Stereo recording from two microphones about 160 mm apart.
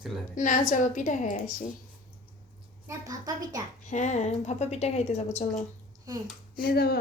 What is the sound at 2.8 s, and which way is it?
Speech, 25° right (ahead or behind).